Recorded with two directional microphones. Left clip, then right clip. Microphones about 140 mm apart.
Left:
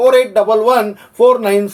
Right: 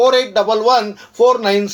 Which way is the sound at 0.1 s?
25° right (ahead or behind).